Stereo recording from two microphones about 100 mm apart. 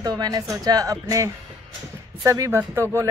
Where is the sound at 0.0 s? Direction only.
40° right (ahead or behind).